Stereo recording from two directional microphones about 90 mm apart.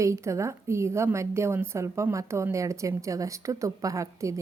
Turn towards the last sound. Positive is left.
turn(degrees=-35)  # may be behind; listen again after turning